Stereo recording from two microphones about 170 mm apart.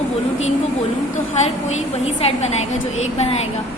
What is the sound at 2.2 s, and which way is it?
A woman's voice, 40° left (ahead or behind).